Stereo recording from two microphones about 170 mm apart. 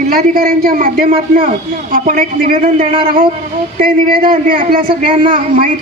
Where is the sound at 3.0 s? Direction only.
55° right (ahead or behind).